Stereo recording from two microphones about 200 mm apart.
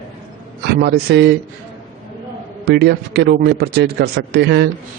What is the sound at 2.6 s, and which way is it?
A man's voice, 55° right (ahead or behind).